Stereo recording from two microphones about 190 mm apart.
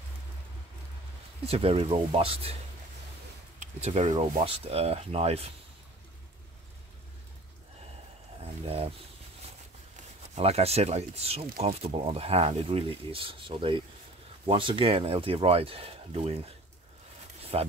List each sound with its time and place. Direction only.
1.4 s speech: 30° right (ahead or behind)
3.5 s speech: 35° right (ahead or behind)
8.6 s speech: 30° right (ahead or behind)
10.3 s speech: 35° right (ahead or behind)
17.5 s speech: 30° right (ahead or behind)